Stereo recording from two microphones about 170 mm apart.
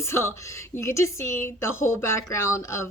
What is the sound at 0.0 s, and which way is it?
A woman's voice, 15° left (ahead or behind).